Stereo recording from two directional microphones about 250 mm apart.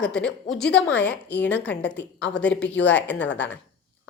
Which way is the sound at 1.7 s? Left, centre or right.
Left.